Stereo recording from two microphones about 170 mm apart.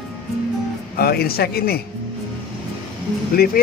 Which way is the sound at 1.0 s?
65° left (ahead or behind).